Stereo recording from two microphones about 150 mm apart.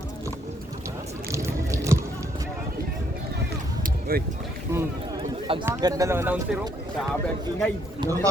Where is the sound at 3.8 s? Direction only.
80° right.